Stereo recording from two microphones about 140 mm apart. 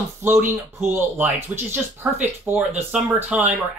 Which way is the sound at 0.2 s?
15° right (ahead or behind).